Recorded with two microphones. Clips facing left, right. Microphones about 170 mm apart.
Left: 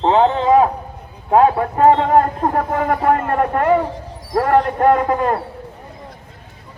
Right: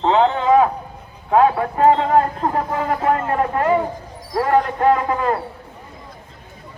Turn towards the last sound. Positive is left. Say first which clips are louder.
# left 2 dB
turn(degrees=45)  # may be behind; listen again after turning